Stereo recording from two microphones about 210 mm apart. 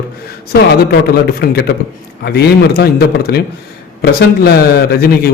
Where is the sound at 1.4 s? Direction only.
50° left (ahead or behind).